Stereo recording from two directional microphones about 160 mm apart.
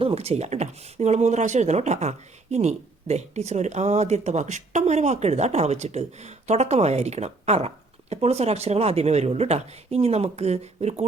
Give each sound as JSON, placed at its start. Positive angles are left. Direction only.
{"t": 0.0, "sound": "speech", "side_deg": -40}